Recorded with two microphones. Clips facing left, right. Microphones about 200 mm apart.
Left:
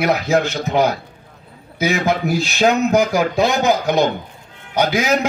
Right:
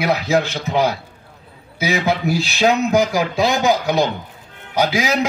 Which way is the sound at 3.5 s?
35° left (ahead or behind).